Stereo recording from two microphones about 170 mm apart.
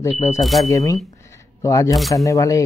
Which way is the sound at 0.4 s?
Centre (ahead or behind).